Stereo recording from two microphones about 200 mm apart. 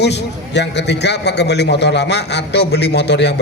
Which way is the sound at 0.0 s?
60° left (ahead or behind).